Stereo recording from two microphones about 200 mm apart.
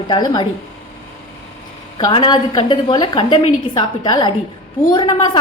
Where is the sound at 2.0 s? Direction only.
20° left (ahead or behind).